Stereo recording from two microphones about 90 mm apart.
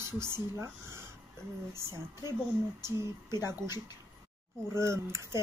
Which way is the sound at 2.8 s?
30° right (ahead or behind).